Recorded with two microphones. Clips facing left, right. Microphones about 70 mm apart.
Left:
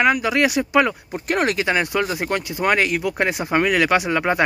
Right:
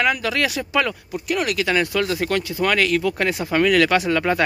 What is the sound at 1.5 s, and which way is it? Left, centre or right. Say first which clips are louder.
Speech: even; left.